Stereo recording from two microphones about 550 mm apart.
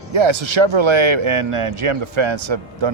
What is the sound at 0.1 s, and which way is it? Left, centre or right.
A man's voice, right.